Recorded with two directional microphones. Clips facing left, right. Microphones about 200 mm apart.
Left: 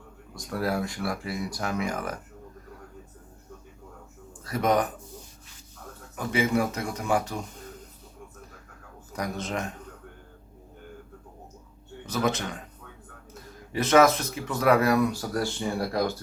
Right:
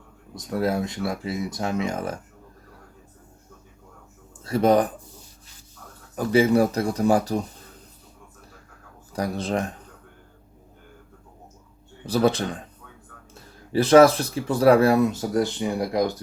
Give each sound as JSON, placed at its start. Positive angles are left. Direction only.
{"t": 0.3, "sound": "speech", "side_deg": -20}
{"t": 4.4, "sound": "speech", "side_deg": -30}
{"t": 6.1, "sound": "speech", "side_deg": -35}
{"t": 9.1, "sound": "speech", "side_deg": -30}
{"t": 12.0, "sound": "speech", "side_deg": -35}
{"t": 13.7, "sound": "speech", "side_deg": -35}